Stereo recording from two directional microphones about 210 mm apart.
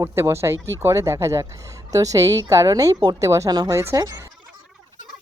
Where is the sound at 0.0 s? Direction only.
15° right (ahead or behind).